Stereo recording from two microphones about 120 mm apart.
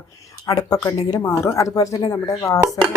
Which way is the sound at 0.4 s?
30° left (ahead or behind).